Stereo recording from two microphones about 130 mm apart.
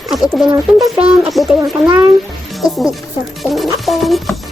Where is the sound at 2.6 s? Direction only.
Centre (ahead or behind).